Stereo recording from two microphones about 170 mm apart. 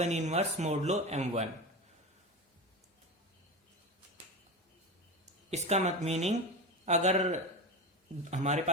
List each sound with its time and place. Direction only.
0.0 s speech: 40° right (ahead or behind)
5.5 s speech: 40° right (ahead or behind)